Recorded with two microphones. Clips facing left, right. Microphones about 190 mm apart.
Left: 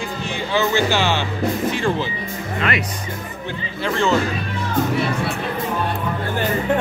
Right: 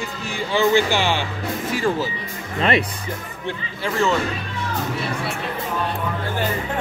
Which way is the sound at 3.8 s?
Centre (ahead or behind).